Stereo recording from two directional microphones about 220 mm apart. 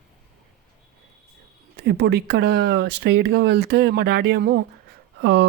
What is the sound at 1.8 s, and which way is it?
Speech, 50° right (ahead or behind).